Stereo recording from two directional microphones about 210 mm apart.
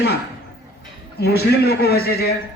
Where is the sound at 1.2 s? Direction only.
50° left (ahead or behind).